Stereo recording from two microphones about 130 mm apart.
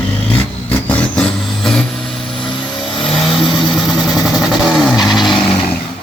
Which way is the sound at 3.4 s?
35° left (ahead or behind).